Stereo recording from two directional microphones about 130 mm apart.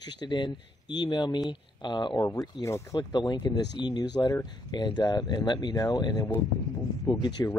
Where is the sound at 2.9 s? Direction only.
35° left (ahead or behind).